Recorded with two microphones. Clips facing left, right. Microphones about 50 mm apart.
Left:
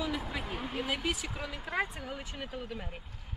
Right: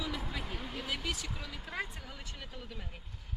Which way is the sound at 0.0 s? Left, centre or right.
Centre.